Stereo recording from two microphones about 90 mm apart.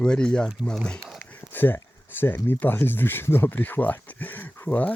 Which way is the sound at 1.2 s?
20° left (ahead or behind).